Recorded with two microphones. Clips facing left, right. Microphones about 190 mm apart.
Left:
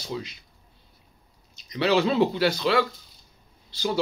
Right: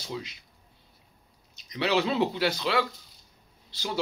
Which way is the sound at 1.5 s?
20° right (ahead or behind).